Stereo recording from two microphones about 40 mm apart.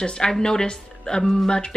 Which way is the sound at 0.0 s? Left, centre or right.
Centre.